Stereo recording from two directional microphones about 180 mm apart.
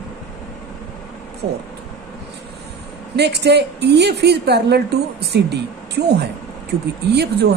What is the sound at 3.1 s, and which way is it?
A woman's voice, 65° right (ahead or behind).